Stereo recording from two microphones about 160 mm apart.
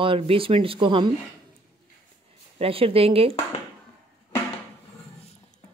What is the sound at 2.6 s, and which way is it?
Speech, 35° right (ahead or behind).